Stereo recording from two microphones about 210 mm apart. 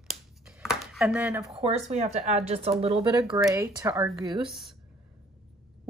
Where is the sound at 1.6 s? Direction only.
30° right (ahead or behind); by 4.1 s 15° right (ahead or behind).